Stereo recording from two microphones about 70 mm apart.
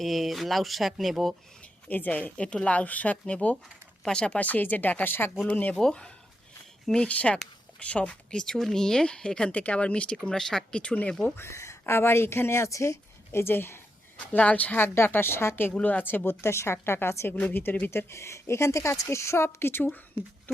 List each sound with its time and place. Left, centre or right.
0.0 s speech: centre
1.9 s speech: left
5.7 s speech: centre
11.3 s speech: left
14.3 s speech: left
14.9 s speech: left
15.7 s speech: left
17.9 s speech: left